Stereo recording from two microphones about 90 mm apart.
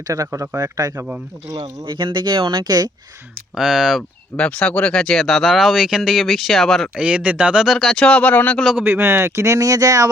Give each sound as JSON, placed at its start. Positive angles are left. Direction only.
{"t": 0.1, "sound": "speech", "side_deg": -40}
{"t": 1.9, "sound": "speech", "side_deg": -60}
{"t": 3.5, "sound": "speech", "side_deg": -5}
{"t": 4.4, "sound": "speech", "side_deg": 15}
{"t": 6.9, "sound": "speech", "side_deg": -15}
{"t": 8.8, "sound": "speech", "side_deg": -30}